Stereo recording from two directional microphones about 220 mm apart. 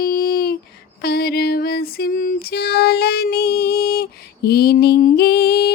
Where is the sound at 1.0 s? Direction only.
45° left (ahead or behind).